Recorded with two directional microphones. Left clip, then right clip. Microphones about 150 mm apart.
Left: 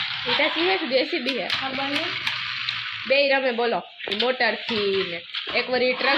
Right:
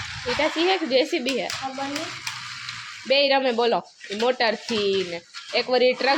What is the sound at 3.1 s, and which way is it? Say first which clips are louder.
A woman's voice: right 1 dB; 25° right (ahead or behind).